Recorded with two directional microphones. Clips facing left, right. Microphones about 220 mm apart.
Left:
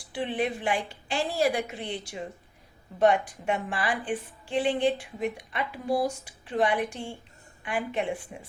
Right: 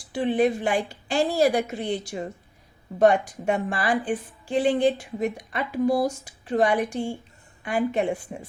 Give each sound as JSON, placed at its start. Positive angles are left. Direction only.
{"t": 0.1, "sound": "a woman's voice", "side_deg": -45}